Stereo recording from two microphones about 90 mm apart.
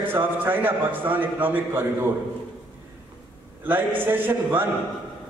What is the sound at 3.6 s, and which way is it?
A man's voice, 20° right (ahead or behind).